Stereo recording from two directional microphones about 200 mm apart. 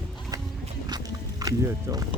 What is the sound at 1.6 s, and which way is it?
Speech, 15° right (ahead or behind).